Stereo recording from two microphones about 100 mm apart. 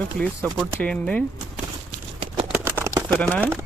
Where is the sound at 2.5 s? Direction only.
25° right (ahead or behind).